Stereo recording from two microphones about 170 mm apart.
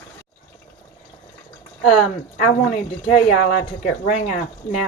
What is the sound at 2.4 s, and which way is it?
Speech, 45° left (ahead or behind).